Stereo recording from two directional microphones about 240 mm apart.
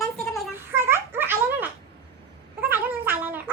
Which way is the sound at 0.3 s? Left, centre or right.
Centre.